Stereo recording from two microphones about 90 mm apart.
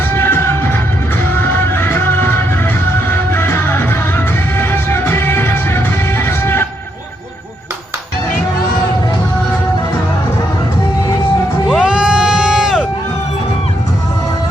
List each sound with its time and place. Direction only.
0.1 s music: 25° left (ahead or behind)
11.7 s crowd: 5° right (ahead or behind)